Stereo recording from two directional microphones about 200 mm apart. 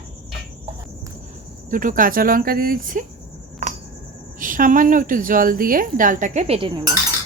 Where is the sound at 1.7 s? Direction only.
40° right (ahead or behind).